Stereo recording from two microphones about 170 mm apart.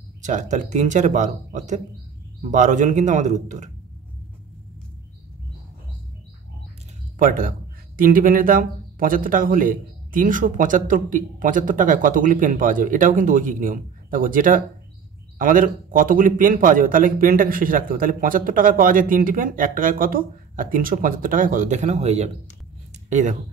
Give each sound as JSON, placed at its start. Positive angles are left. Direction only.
{"t": 0.2, "sound": "a man's voice", "side_deg": -45}
{"t": 7.2, "sound": "a man's voice", "side_deg": -55}